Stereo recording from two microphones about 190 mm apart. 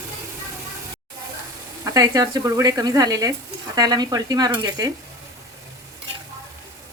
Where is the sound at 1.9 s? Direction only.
20° right (ahead or behind).